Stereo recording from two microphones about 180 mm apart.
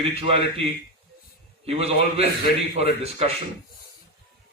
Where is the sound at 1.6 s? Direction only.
35° right (ahead or behind).